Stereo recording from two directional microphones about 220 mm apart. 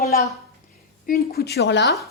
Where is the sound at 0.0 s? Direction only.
40° left (ahead or behind).